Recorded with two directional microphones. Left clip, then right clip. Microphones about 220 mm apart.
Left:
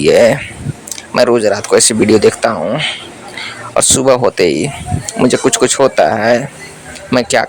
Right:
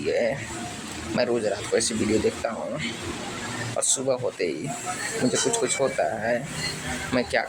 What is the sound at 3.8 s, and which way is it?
Speech, 45° left (ahead or behind).